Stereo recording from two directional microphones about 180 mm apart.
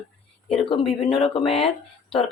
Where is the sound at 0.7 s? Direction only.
30° left (ahead or behind).